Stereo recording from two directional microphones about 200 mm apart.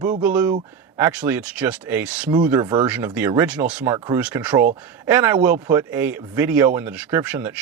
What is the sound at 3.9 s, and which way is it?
Speech, 20° right (ahead or behind).